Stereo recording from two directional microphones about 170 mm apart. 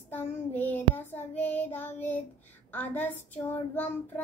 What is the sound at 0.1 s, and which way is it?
Child singing, 10° left (ahead or behind).